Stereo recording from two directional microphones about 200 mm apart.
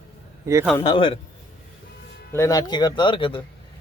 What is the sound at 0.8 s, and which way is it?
Speech, 20° left (ahead or behind).